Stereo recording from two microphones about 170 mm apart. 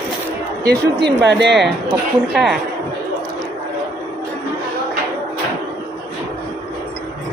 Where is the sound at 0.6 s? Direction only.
80° right.